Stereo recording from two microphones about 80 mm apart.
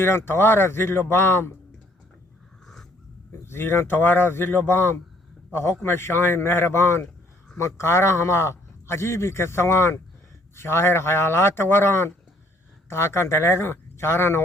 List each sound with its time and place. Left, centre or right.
0.0 s speech: left
3.4 s a man's voice: left